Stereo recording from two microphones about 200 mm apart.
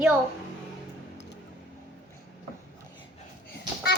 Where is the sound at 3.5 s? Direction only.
55° left (ahead or behind).